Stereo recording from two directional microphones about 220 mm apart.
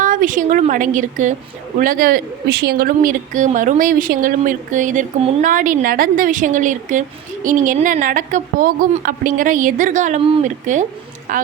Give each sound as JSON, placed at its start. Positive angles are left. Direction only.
{"t": 0.0, "sound": "a woman's voice", "side_deg": -35}